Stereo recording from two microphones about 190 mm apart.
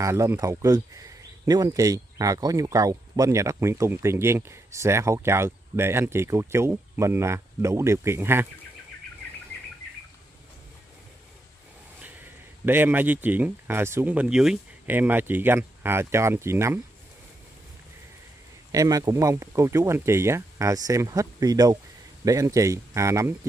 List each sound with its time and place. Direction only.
0.0 s speech: 15° right (ahead or behind)
12.6 s speech: 10° right (ahead or behind)
18.7 s speech: 20° right (ahead or behind)